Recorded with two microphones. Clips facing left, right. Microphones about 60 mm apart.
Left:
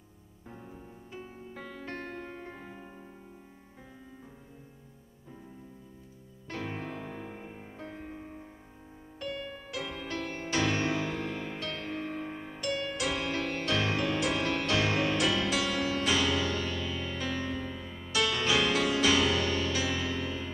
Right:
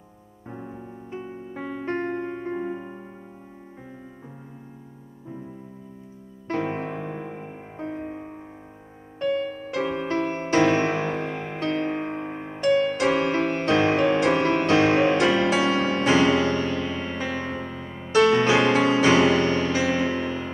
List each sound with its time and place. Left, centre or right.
0.5 s music: right
6.4 s music: right